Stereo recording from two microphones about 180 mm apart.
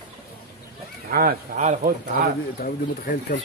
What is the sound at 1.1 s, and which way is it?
Speech, 50° right (ahead or behind).